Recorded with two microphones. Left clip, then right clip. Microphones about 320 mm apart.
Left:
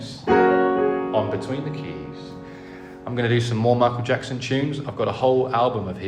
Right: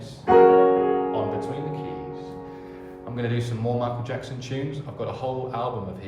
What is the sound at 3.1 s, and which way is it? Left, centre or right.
A man's voice, left.